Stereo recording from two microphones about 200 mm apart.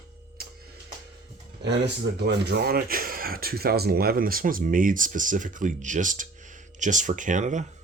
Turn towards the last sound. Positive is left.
turn(degrees=-35)  # may be behind; listen again after turning